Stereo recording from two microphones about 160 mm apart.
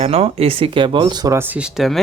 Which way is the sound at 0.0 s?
40° right (ahead or behind).